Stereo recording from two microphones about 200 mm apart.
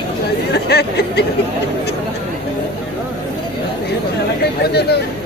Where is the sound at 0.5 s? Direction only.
55° left (ahead or behind).